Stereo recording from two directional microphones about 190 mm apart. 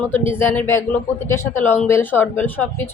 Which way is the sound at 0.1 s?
10° left (ahead or behind).